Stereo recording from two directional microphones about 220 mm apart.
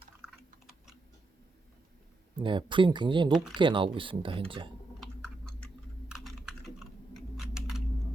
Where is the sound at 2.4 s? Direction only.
20° right (ahead or behind).